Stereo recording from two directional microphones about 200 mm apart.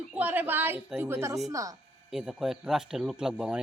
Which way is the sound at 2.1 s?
Centre (ahead or behind).